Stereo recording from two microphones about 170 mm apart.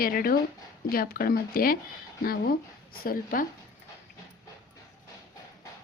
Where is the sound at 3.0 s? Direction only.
55° left (ahead or behind).